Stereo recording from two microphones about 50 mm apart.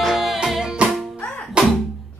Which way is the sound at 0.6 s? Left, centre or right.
Centre.